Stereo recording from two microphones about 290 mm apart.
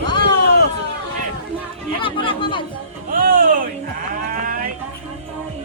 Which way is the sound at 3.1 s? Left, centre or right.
Right.